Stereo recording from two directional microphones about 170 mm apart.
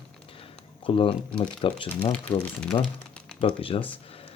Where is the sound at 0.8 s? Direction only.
30° left (ahead or behind).